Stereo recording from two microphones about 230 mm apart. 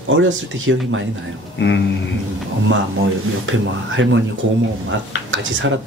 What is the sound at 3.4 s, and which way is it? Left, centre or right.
Speech, right.